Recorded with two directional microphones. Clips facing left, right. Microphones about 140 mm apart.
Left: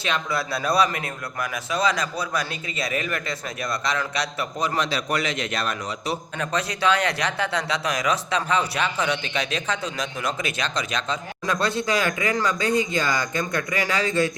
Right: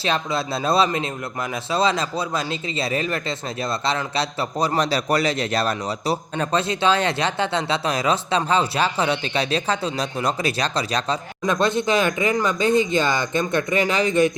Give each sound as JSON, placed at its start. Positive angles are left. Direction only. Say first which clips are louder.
{"t": 0.0, "sound": "speech", "louder": "right 3 dB", "side_deg": -30}
{"t": 11.4, "sound": "speech", "louder": "right 4 dB", "side_deg": -20}